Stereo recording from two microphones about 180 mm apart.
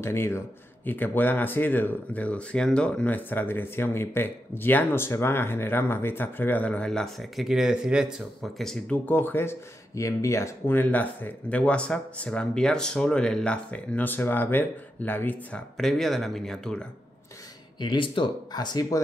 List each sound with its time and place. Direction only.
0.0 s speech: 15° left (ahead or behind)
17.7 s speech: 25° left (ahead or behind)